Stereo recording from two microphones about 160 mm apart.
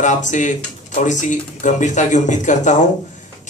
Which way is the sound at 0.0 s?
50° left (ahead or behind).